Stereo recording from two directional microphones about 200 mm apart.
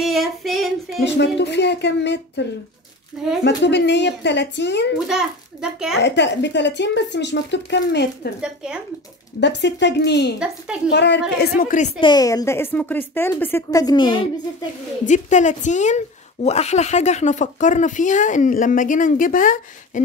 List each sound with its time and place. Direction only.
0.0 s child singing: centre (ahead or behind)
1.0 s speech: 60° left (ahead or behind)
3.4 s speech: 60° left (ahead or behind)
5.0 s a child's voice: 5° right (ahead or behind)
6.0 s speech: 60° left (ahead or behind)
8.4 s a child's voice: 5° right (ahead or behind)
9.4 s speech: 60° left (ahead or behind); by 11.9 s 40° left (ahead or behind)
12.0 s speech: 20° left (ahead or behind)
15.0 s speech: 35° left (ahead or behind)